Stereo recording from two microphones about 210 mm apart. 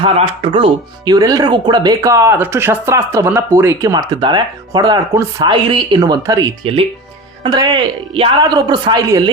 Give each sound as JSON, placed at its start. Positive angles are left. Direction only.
{"t": 0.0, "sound": "speech", "side_deg": -25}